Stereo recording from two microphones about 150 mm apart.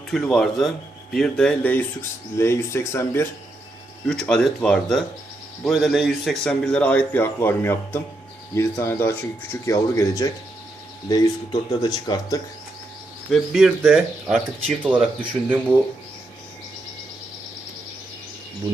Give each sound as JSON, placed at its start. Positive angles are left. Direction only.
{"t": 0.1, "sound": "speech", "side_deg": 5}
{"t": 4.0, "sound": "speech", "side_deg": 5}
{"t": 13.3, "sound": "speech", "side_deg": 0}